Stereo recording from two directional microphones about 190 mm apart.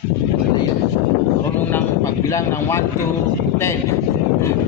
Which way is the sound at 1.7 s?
15° left (ahead or behind).